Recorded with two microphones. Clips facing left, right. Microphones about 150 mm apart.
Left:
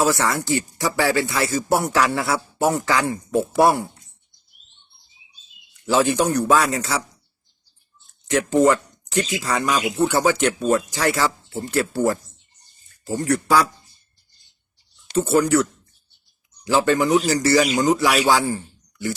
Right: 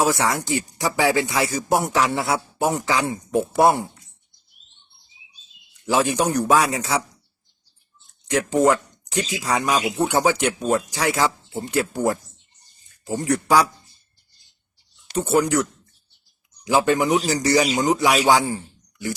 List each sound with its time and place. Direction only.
0.0 s speech: 15° right (ahead or behind)
5.8 s speech: 15° right (ahead or behind)
8.6 s speech: 10° right (ahead or behind)
15.1 s speech: 15° right (ahead or behind)
16.6 s a man's voice: 15° right (ahead or behind)